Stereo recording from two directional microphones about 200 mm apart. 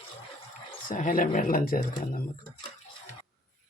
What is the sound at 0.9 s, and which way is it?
Speech, 40° left (ahead or behind).